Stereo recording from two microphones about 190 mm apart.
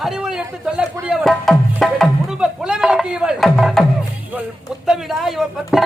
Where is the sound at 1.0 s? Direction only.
Centre (ahead or behind).